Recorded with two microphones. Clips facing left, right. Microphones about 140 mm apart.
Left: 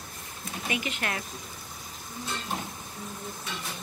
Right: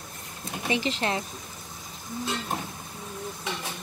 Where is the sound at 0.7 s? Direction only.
30° right (ahead or behind).